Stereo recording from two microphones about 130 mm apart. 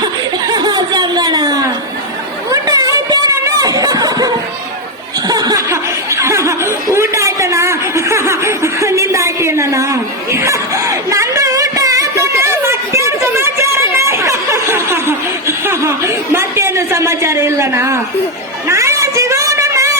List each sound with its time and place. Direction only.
0.0 s laughter: 30° right (ahead or behind)
2.5 s snicker: 25° right (ahead or behind)
5.3 s laughter: 30° right (ahead or behind)
6.9 s chuckle: 20° right (ahead or behind)
18.7 s a sound: 25° right (ahead or behind)